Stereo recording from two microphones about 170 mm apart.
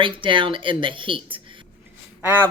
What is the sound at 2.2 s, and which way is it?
Speech, 10° right (ahead or behind).